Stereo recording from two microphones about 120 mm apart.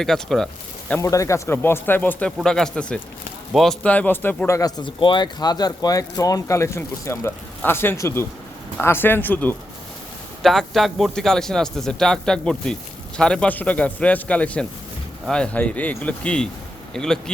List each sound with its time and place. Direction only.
0.0 s speech: 5° left (ahead or behind)
0.9 s speech: 25° left (ahead or behind)
4.8 s speech: 40° left (ahead or behind); by 9.6 s 15° left (ahead or behind)
10.4 s speech: centre (ahead or behind)